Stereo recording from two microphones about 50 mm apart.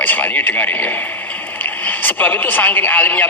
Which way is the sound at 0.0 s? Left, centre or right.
Left.